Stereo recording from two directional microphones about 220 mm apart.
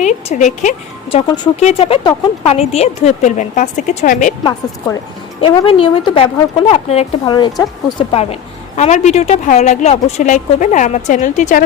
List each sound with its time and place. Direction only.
0.0 s speech: 30° left (ahead or behind)
5.4 s speech: 25° left (ahead or behind)